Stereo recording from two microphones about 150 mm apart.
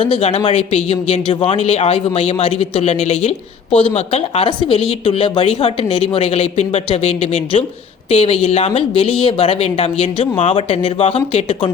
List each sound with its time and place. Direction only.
0.0 s speech: 40° left (ahead or behind)